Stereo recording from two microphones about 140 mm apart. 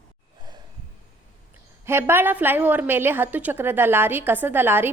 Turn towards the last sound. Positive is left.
turn(degrees=-15)  # may be behind; listen again after turning